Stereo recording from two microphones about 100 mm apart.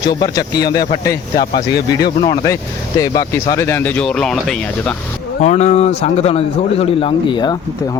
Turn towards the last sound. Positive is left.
turn(degrees=65)  # may be behind; listen again after turning